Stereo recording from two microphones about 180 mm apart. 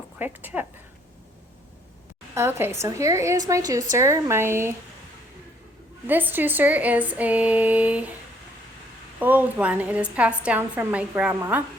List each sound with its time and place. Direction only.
0.2 s a woman's voice: 10° right (ahead or behind)
2.3 s a woman's voice: 15° right (ahead or behind)
6.1 s a woman's voice: 10° right (ahead or behind)
9.1 s a woman's voice: 10° right (ahead or behind)